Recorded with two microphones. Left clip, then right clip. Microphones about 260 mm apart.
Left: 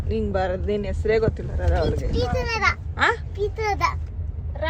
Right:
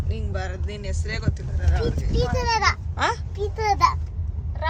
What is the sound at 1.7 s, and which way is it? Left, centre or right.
Speech, right.